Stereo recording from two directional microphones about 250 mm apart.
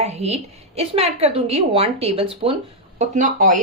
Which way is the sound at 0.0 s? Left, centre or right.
Right.